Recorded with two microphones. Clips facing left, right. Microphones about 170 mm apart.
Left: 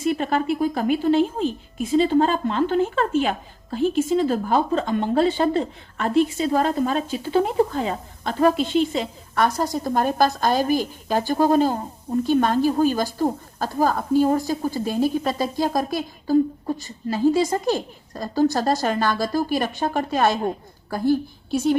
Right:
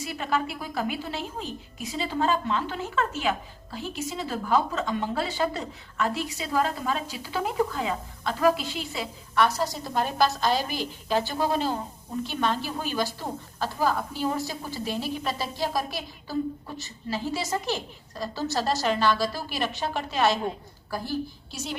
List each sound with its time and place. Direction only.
0.0 s a sound: 50° left (ahead or behind)
0.4 s a woman's voice: 50° left (ahead or behind)
4.5 s speech: 30° left (ahead or behind)
4.9 s a woman's voice: 55° left (ahead or behind)
5.2 s speech: 35° left (ahead or behind)
6.0 s a woman's voice: 50° left (ahead or behind)
7.3 s speech: 30° left (ahead or behind)
7.7 s a woman's voice: 45° left (ahead or behind)
8.4 s a woman's voice: 30° left (ahead or behind)
8.9 s a woman's voice: 45° left (ahead or behind)